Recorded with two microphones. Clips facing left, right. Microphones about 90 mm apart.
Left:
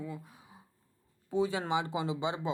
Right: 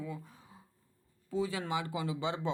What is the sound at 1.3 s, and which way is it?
Speech, 25° left (ahead or behind).